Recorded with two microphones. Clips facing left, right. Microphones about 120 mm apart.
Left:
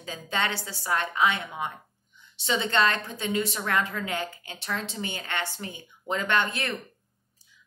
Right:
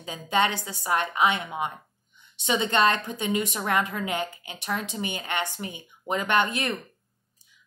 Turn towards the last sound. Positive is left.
turn(degrees=-15)  # may be behind; listen again after turning